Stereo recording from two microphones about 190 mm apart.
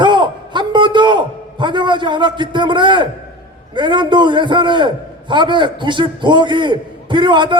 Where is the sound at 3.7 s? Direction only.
25° right (ahead or behind).